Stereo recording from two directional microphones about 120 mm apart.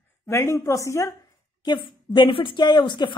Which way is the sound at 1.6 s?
40° left (ahead or behind).